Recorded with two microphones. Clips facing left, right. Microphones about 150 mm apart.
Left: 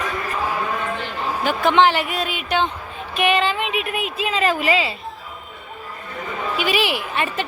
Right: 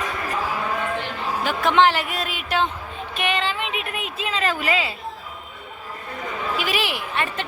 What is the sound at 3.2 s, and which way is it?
A woman's voice, 10° left (ahead or behind).